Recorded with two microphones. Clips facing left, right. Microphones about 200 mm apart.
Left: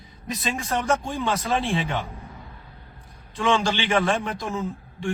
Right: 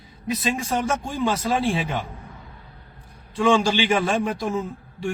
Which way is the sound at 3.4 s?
10° right (ahead or behind).